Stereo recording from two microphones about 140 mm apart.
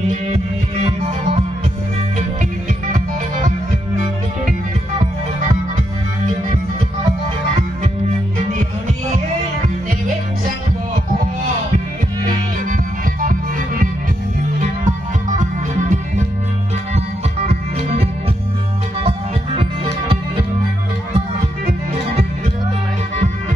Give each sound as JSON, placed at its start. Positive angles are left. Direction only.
{"t": 0.8, "sound": "music", "side_deg": -45}
{"t": 2.9, "sound": "music", "side_deg": -65}
{"t": 12.6, "sound": "music", "side_deg": -75}
{"t": 14.6, "sound": "music", "side_deg": -65}
{"t": 17.5, "sound": "music", "side_deg": -50}